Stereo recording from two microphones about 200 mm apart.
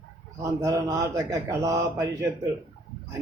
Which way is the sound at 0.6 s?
15° right (ahead or behind).